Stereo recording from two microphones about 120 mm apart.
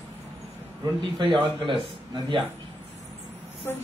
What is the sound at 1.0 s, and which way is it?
Speech, 45° right (ahead or behind).